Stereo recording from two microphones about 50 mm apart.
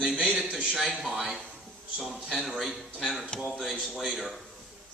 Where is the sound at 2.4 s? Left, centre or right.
Centre.